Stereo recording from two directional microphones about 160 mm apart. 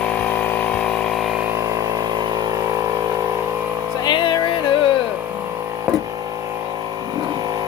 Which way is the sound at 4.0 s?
30° left (ahead or behind).